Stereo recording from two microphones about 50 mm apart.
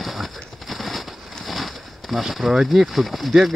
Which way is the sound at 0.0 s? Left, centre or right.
Centre.